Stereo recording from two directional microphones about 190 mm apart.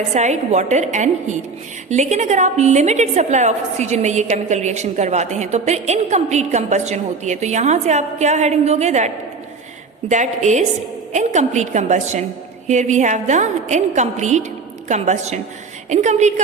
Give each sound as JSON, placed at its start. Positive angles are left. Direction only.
{"t": 0.1, "sound": "a woman's voice", "side_deg": -35}
{"t": 10.1, "sound": "a woman's voice", "side_deg": -40}